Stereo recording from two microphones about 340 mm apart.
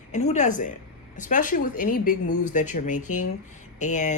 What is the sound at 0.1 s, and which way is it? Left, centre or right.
Speech, centre.